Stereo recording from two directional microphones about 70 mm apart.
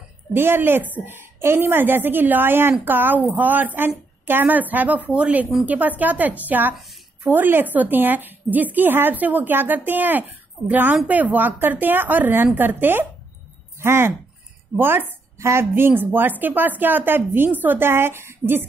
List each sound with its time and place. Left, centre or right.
0.3 s a woman's voice: right
15.3 s a woman's voice: right
15.7 s a woman's voice: right